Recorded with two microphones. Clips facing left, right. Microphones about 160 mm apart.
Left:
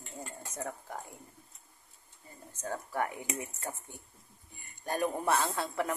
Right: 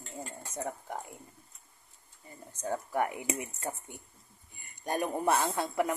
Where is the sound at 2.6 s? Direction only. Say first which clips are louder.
Right 3 dB; 15° right (ahead or behind).